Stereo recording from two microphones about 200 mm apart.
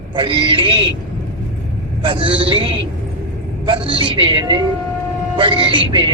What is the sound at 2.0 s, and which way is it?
A man's voice, 25° right (ahead or behind).